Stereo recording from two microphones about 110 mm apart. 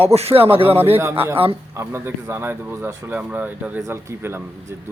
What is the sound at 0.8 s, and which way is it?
Speech, 20° right (ahead or behind).